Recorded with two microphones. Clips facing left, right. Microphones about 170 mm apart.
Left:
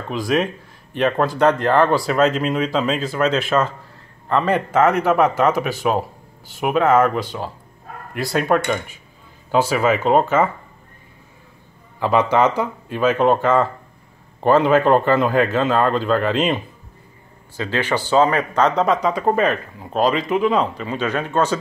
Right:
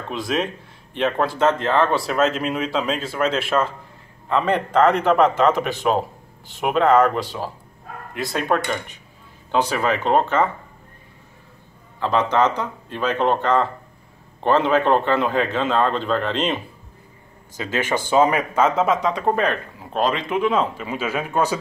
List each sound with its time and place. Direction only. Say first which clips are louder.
0.1 s speech: left 4 dB; centre (ahead or behind)
12.0 s speech: left 2 dB; 10° left (ahead or behind)
17.6 s speech: left 2 dB; 15° right (ahead or behind)